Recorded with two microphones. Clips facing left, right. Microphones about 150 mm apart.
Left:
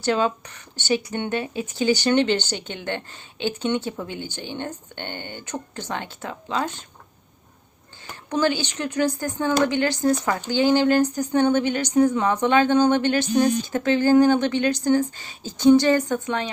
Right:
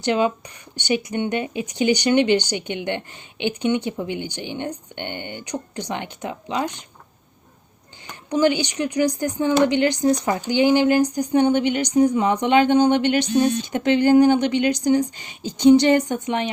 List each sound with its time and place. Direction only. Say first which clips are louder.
0.0 s speech: right 2 dB; 15° right (ahead or behind)
8.3 s a woman's voice: right 3 dB; 15° right (ahead or behind)